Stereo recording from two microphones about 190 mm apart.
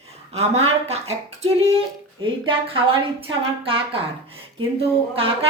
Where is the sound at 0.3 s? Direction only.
35° right (ahead or behind).